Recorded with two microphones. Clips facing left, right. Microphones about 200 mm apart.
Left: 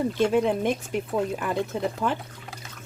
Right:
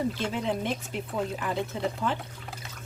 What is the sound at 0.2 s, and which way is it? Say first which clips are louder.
Speech: left 8 dB; 50° left (ahead or behind).